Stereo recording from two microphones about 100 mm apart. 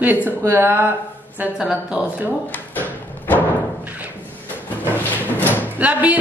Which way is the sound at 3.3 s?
15° right (ahead or behind).